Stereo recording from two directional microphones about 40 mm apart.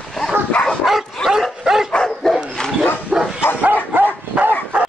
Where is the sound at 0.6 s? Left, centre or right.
Left.